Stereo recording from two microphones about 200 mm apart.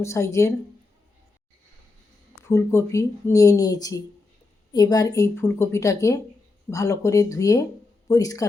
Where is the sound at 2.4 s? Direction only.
15° left (ahead or behind).